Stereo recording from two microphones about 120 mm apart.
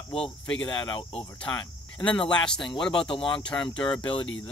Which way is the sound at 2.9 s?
45° left (ahead or behind).